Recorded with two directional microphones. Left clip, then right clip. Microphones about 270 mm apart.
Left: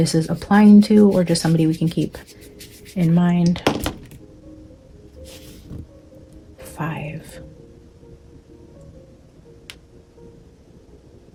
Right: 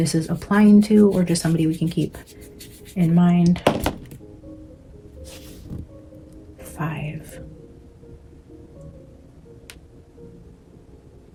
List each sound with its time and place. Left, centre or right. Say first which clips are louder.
0.0 s speech: left 3 dB; left
2.0 s speech: left 1 dB; centre
2.9 s speech: even; left
3.6 s chopping: right 1 dB; centre
5.3 s music: even; centre
6.6 s speech: left 2 dB; left